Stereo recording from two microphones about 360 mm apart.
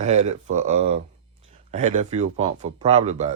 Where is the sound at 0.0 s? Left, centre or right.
Centre.